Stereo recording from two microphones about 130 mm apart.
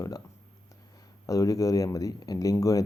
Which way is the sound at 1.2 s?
25° left (ahead or behind).